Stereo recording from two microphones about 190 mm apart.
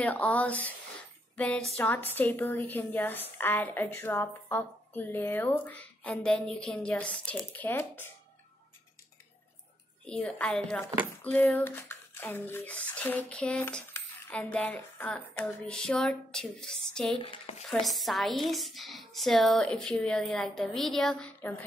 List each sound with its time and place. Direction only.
0.0 s a woman's voice: 10° left (ahead or behind)
1.3 s a sound: 5° left (ahead or behind)
1.8 s a woman's voice: 10° left (ahead or behind)
10.0 s cutlery: 5° left (ahead or behind)
11.2 s a woman's voice: 10° left (ahead or behind)
12.9 s cutlery: 5° left (ahead or behind)
17.2 s speech: 30° left (ahead or behind)
17.6 s cutlery: centre (ahead or behind)